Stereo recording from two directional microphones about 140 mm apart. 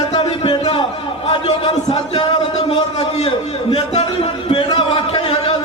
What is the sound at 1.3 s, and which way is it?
Speech, 40° left (ahead or behind).